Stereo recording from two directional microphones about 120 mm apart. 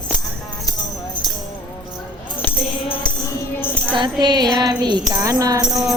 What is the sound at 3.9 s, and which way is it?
Music, 40° right (ahead or behind).